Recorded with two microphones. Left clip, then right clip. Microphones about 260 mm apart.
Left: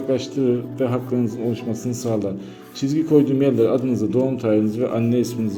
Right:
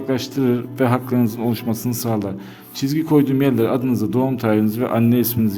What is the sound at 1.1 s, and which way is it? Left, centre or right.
A man's voice, right.